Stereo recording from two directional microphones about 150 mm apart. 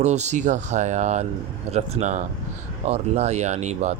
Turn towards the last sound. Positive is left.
turn(degrees=-50)  # may be behind; listen again after turning